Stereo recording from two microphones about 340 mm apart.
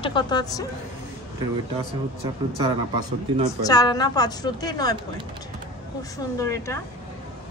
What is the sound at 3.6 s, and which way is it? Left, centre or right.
A woman's voice, centre.